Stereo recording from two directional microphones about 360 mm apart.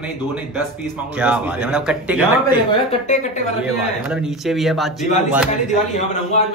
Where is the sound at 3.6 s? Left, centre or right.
Centre.